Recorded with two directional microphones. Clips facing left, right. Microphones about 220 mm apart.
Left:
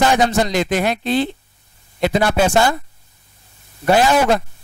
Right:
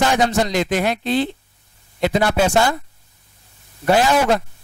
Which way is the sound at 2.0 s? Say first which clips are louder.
Left 1 dB; 15° left (ahead or behind).